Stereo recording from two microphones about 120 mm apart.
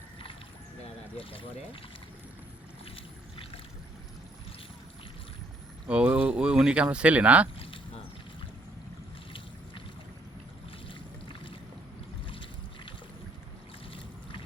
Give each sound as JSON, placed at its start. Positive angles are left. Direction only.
{"t": 1.2, "sound": "speech", "side_deg": 50}
{"t": 2.9, "sound": "boat", "side_deg": 50}
{"t": 5.9, "sound": "speech", "side_deg": -10}
{"t": 10.8, "sound": "boat", "side_deg": 45}